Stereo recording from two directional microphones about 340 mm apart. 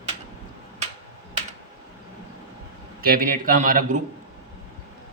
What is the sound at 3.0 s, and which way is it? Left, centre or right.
Speech, right.